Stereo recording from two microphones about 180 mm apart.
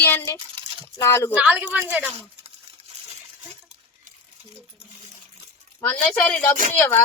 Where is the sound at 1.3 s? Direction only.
10° right (ahead or behind).